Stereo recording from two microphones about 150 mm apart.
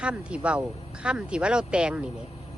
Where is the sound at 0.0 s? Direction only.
5° right (ahead or behind).